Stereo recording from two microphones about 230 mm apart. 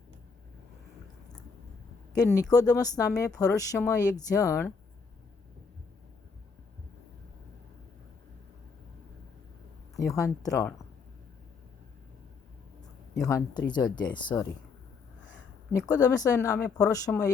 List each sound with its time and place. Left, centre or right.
2.1 s speech: centre
9.9 s speech: centre
13.2 s speech: centre
15.9 s speech: centre